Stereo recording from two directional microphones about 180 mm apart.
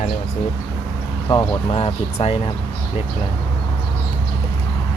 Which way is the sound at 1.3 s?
25° left (ahead or behind).